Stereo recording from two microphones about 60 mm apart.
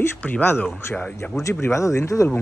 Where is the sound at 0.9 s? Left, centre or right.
Centre.